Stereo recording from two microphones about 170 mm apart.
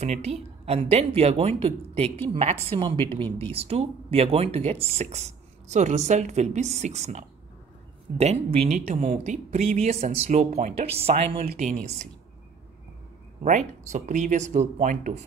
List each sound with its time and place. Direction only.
0.0 s speech: 40° right (ahead or behind)
13.4 s speech: 45° right (ahead or behind)